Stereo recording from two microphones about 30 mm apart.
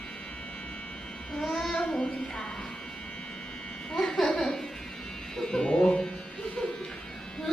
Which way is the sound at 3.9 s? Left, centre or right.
Left.